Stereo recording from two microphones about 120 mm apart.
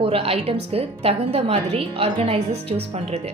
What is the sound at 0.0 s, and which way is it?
A woman's voice, 55° right (ahead or behind).